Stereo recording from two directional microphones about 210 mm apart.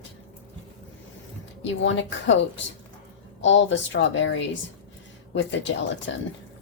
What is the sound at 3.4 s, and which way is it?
Speech, 60° left (ahead or behind).